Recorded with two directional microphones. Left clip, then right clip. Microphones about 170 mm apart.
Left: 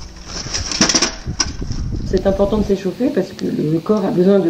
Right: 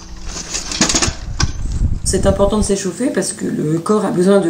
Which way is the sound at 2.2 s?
25° right (ahead or behind).